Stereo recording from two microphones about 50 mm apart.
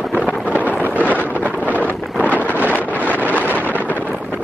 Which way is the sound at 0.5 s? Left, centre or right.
Right.